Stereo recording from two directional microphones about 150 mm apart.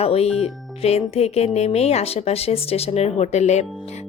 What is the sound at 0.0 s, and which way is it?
A woman's voice, 40° left (ahead or behind).